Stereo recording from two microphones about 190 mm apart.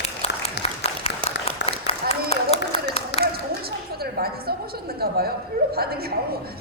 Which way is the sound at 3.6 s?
55° right (ahead or behind).